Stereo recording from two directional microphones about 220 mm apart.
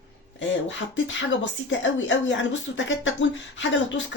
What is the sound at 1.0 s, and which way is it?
A woman's voice, 55° left (ahead or behind).